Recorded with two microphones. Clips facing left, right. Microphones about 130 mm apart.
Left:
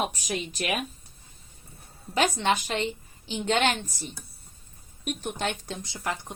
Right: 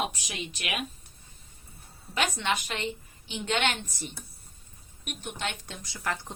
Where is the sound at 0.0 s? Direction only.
45° left (ahead or behind).